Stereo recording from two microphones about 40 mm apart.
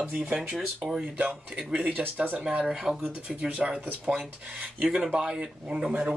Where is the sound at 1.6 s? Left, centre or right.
Right.